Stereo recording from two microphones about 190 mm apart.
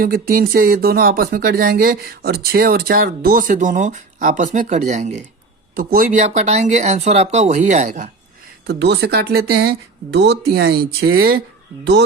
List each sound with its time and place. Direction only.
0.0 s speech: 50° right (ahead or behind)
8.6 s speech: 60° right (ahead or behind)